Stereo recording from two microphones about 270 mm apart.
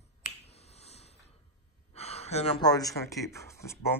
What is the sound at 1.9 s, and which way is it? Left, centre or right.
Speech, left.